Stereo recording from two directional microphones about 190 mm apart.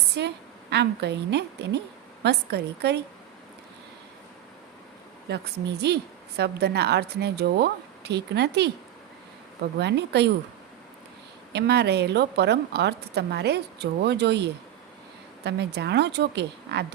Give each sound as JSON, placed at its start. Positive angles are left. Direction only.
{"t": 0.2, "sound": "a woman's voice", "side_deg": -60}
{"t": 5.3, "sound": "a woman's voice", "side_deg": -60}
{"t": 9.7, "sound": "a woman's voice", "side_deg": -65}
{"t": 11.5, "sound": "a woman's voice", "side_deg": -60}